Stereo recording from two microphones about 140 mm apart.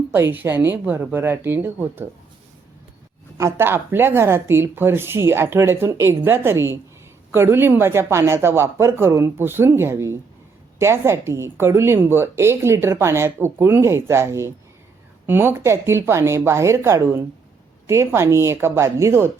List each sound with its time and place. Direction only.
0.1 s a woman's voice: 15° right (ahead or behind)
3.3 s a woman's voice: 20° right (ahead or behind)